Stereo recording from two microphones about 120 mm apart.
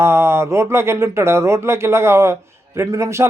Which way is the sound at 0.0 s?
20° right (ahead or behind).